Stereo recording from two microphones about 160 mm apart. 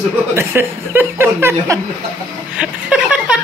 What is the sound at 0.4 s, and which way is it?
A man's voice, 15° right (ahead or behind).